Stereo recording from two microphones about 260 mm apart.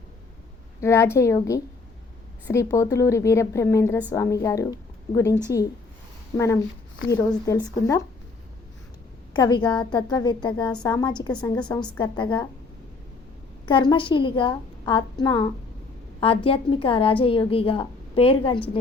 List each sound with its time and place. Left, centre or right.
0.8 s a woman's voice: centre
9.3 s a woman's voice: centre
11.5 s a woman's voice: centre
11.9 s a woman's voice: centre
13.7 s a woman's voice: centre